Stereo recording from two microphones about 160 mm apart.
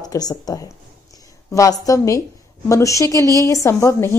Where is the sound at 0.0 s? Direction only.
25° left (ahead or behind).